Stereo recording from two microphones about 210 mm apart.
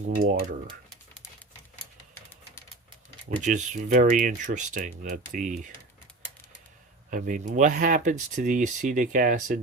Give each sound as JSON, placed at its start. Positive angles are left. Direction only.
{"t": 0.2, "sound": "speech", "side_deg": -40}
{"t": 3.4, "sound": "speech", "side_deg": -35}
{"t": 7.1, "sound": "speech", "side_deg": -40}